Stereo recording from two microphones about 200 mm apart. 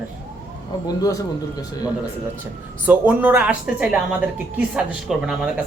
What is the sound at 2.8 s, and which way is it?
Speech, 10° right (ahead or behind).